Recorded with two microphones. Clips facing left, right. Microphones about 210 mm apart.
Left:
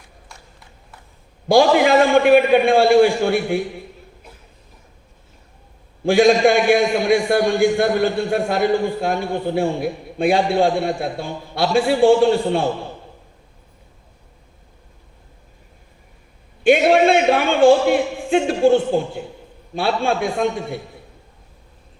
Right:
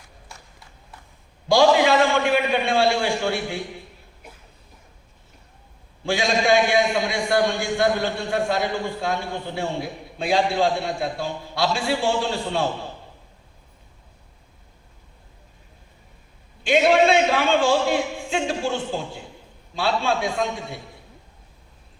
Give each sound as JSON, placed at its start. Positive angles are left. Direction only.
{"t": 1.5, "sound": "a man's voice", "side_deg": 55}
{"t": 6.1, "sound": "a man's voice", "side_deg": 55}
{"t": 16.6, "sound": "a man's voice", "side_deg": 55}